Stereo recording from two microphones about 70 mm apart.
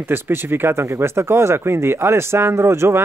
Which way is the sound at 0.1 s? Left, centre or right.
Right.